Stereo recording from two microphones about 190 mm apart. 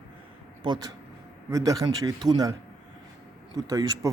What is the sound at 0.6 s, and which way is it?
Speech, 20° right (ahead or behind).